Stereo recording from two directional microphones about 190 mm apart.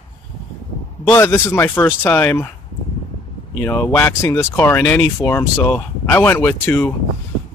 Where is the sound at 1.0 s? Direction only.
10° left (ahead or behind).